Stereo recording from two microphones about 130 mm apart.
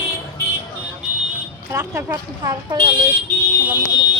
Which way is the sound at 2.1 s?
30° right (ahead or behind).